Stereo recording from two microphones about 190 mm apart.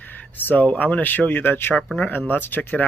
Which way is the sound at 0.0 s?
10° left (ahead or behind).